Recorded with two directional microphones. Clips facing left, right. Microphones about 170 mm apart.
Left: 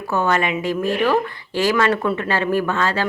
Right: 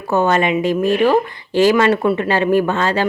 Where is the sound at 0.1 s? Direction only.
20° right (ahead or behind).